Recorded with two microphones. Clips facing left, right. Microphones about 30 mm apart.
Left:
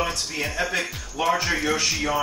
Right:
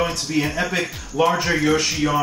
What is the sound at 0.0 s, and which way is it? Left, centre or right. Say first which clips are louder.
Speech: right 5 dB; centre.